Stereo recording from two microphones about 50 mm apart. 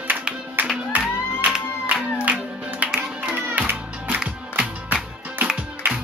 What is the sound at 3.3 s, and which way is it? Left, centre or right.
Music, right.